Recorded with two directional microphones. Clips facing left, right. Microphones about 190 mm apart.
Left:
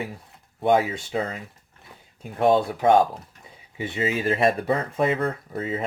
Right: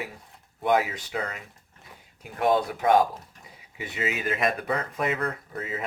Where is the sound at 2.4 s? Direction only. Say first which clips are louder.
Left 4 dB; 25° left (ahead or behind).